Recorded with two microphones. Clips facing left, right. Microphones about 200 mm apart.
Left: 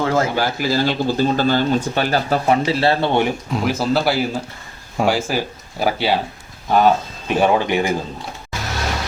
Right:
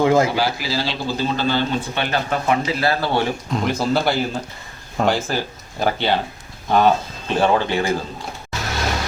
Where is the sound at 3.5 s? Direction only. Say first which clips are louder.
Even; 5° left (ahead or behind).